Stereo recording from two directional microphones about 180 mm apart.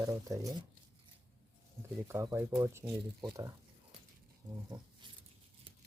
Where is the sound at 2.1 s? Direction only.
15° right (ahead or behind).